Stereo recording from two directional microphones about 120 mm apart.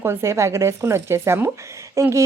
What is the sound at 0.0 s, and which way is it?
A woman's voice, 20° right (ahead or behind).